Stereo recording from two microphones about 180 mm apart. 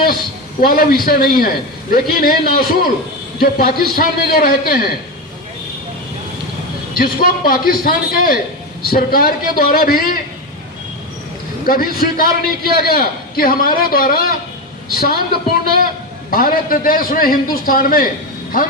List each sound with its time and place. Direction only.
0.6 s a man's voice: 55° left (ahead or behind)
6.9 s a man's voice: 55° left (ahead or behind)
11.6 s a man's voice: 55° left (ahead or behind)
16.3 s a man's voice: 50° left (ahead or behind)